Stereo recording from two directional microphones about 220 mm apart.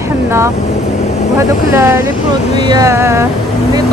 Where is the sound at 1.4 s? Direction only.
15° right (ahead or behind).